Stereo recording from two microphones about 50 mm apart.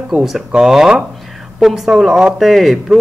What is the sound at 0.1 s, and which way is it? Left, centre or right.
A woman's voice, centre.